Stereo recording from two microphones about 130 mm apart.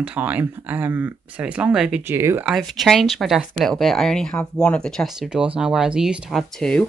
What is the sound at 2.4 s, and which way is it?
Speech, centre (ahead or behind).